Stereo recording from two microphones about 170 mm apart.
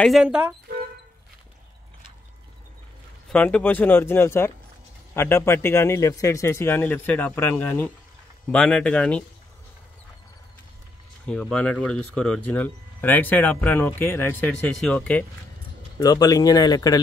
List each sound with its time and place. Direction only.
0.0 s speech: 5° right (ahead or behind)
3.3 s speech: 5° left (ahead or behind)
11.2 s speech: 5° left (ahead or behind)
16.0 s speech: 20° left (ahead or behind)